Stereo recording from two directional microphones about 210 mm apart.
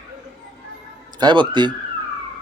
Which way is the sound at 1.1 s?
20° right (ahead or behind).